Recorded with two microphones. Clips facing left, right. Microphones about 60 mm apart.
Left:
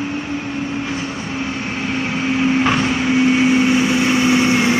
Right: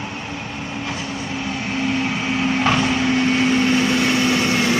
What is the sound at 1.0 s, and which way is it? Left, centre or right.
Vehicle, left.